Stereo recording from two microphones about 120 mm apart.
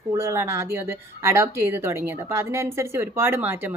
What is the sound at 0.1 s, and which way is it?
Speech, 25° right (ahead or behind).